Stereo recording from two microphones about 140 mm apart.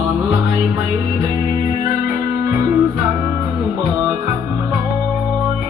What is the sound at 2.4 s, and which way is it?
Music, 20° right (ahead or behind).